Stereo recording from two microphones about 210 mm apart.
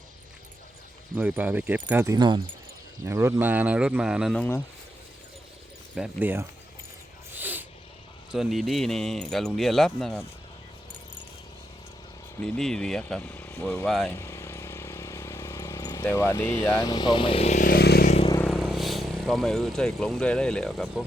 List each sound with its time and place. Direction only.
1.1 s speech: 10° right (ahead or behind)
5.9 s speech: 5° right (ahead or behind)
7.3 s a sound: 10° right (ahead or behind)
8.3 s speech: centre (ahead or behind)
12.5 s speech: 5° left (ahead or behind)
14.1 s vehicle: 10° left (ahead or behind); by 18.1 s 50° left (ahead or behind)
18.1 s vehicle: 25° left (ahead or behind)
18.3 s speech: centre (ahead or behind)